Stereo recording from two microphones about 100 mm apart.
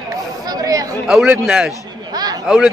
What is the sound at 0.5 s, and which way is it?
Chatter, 35° right (ahead or behind).